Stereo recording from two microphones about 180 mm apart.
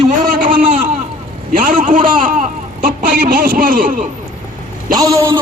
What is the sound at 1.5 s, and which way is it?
Speech, 50° right (ahead or behind).